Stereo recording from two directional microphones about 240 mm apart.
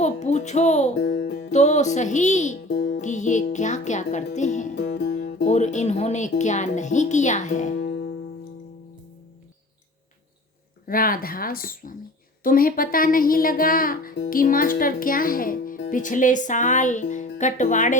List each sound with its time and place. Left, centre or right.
0.0 s speech: left
1.0 s speech: left
3.0 s music: left
4.7 s music: left
5.5 s music: left
7.9 s music: left
10.8 s speech: left